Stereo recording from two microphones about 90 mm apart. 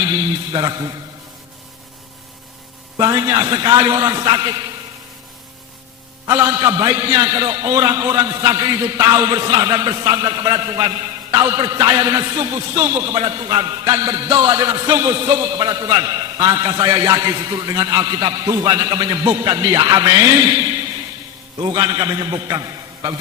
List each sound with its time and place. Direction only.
0.5 s a man's voice: 50° right (ahead or behind)
3.0 s a man's voice: 45° right (ahead or behind)
6.2 s a man's voice: 35° right (ahead or behind)